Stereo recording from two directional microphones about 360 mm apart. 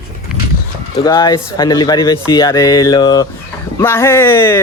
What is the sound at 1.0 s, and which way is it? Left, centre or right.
Speech, centre.